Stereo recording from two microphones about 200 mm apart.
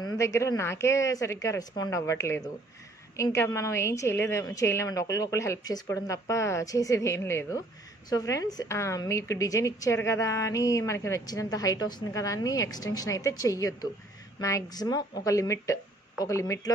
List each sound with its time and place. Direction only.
0.0 s a woman's voice: 15° left (ahead or behind)